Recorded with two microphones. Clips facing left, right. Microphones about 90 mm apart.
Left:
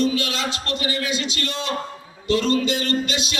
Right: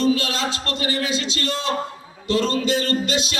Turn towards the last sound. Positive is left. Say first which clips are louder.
# right 1 dB
turn(degrees=-30)  # may be behind; listen again after turning